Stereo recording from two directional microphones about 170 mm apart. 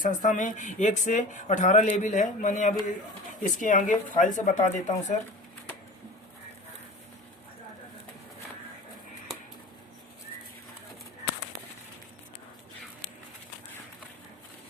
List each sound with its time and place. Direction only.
0.0 s speech: 50° left (ahead or behind)